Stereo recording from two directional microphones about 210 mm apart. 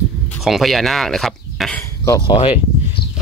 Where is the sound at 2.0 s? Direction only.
15° left (ahead or behind).